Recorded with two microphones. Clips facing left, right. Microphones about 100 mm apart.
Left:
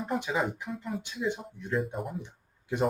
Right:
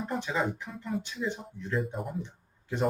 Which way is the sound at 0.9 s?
Centre (ahead or behind).